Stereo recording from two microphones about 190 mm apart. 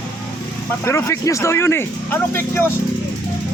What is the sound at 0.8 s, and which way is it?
Speech, 15° left (ahead or behind).